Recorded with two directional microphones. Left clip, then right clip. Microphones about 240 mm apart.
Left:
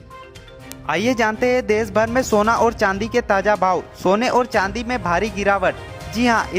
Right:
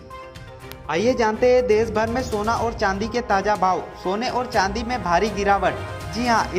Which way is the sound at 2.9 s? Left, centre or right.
Left.